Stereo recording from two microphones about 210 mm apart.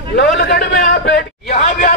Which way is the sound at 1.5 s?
35° left (ahead or behind).